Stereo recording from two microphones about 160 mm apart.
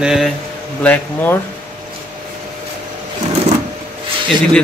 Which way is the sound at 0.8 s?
15° left (ahead or behind).